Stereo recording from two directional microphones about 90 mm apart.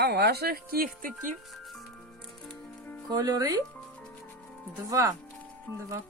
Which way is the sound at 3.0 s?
40° right (ahead or behind).